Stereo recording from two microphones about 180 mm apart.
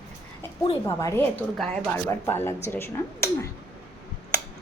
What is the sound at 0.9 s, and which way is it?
Speech, 15° left (ahead or behind).